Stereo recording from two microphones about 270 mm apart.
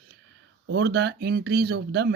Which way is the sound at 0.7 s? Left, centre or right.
Right.